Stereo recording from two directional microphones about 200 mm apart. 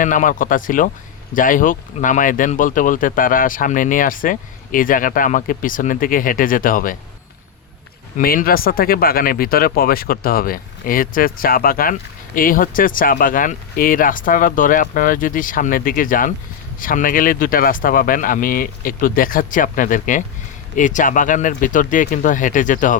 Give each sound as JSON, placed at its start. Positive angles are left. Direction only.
{"t": 0.0, "sound": "speech", "side_deg": 40}
{"t": 8.2, "sound": "speech", "side_deg": 45}